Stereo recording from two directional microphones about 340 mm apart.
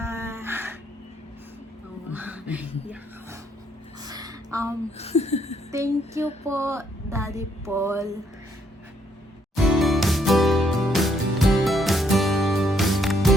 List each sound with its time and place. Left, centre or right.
0.0 s music: centre
2.1 s speech: centre
4.0 s a sound: centre
4.9 s speech: centre
5.7 s a sound: centre
9.6 s music: centre